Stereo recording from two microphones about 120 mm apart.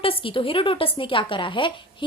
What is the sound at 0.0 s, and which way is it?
Speech, 50° left (ahead or behind).